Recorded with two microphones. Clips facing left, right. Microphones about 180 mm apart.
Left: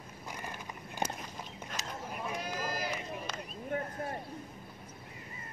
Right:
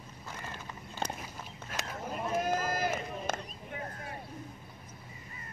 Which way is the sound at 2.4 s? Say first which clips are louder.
Right 6 dB; 50° right (ahead or behind).